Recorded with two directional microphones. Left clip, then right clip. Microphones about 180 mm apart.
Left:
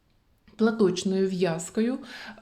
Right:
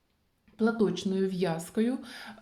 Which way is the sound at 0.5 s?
30° left (ahead or behind).